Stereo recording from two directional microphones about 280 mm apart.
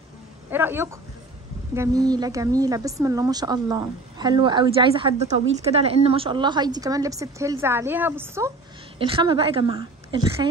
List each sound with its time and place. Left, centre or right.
0.5 s speech: centre
8.9 s a woman's voice: centre